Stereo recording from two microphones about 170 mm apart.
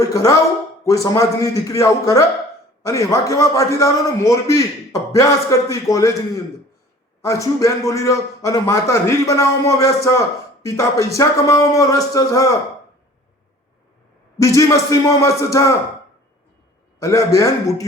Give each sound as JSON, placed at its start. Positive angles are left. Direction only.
{"t": 0.0, "sound": "a man's voice", "side_deg": 20}
{"t": 14.3, "sound": "a man's voice", "side_deg": 20}
{"t": 17.0, "sound": "a man's voice", "side_deg": 20}